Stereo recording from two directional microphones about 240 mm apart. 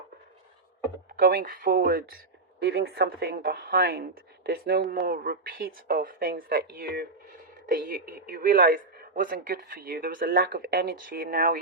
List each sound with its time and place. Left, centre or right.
1.2 s speech: right